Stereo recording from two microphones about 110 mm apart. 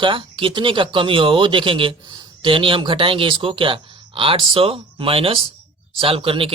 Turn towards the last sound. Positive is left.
turn(degrees=-55)  # may be behind; listen again after turning